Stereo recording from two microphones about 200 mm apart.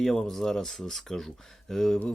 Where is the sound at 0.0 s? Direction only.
Centre (ahead or behind).